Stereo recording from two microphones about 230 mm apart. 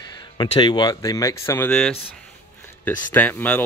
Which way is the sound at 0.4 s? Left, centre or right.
Centre.